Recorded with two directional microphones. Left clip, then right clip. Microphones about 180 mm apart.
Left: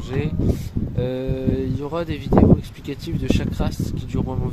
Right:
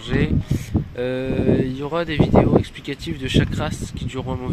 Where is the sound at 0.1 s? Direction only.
Centre (ahead or behind).